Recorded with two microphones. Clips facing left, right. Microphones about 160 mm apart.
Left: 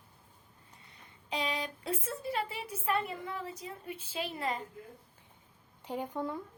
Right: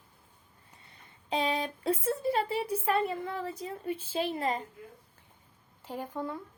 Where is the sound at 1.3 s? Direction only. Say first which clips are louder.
Right 5 dB; 30° right (ahead or behind).